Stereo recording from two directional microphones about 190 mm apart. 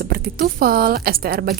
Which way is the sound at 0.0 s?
50° right (ahead or behind).